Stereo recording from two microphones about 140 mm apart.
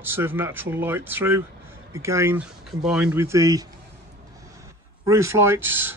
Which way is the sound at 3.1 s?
20° right (ahead or behind).